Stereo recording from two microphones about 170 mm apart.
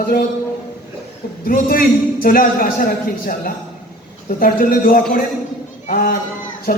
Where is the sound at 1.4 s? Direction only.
55° left (ahead or behind).